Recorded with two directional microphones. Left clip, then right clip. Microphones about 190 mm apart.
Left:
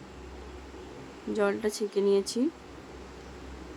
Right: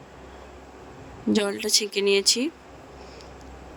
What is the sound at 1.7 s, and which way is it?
Speech, 50° right (ahead or behind).